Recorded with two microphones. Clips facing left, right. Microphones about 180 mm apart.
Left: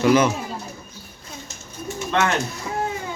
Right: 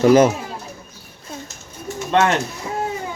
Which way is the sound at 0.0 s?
45° right (ahead or behind).